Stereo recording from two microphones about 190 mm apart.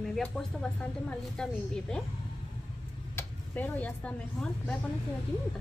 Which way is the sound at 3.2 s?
10° left (ahead or behind).